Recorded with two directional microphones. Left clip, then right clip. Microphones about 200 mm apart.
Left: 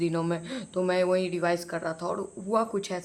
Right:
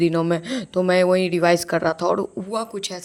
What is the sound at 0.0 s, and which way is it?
Speech, 30° right (ahead or behind).